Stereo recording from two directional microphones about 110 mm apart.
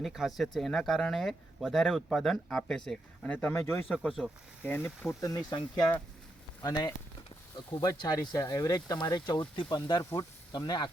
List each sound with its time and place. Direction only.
0.0 s speech: centre (ahead or behind); by 4.9 s 20° left (ahead or behind)
5.2 s speech: 35° left (ahead or behind)